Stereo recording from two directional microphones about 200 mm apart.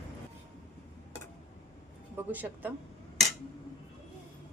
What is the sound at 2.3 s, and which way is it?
Speech, 10° right (ahead or behind).